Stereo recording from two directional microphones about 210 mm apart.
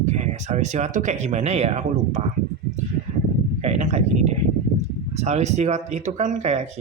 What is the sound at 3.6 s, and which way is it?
Speech, 30° right (ahead or behind).